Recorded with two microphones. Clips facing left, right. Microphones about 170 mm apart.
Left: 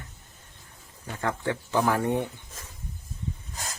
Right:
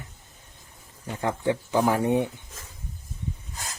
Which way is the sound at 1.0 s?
15° right (ahead or behind).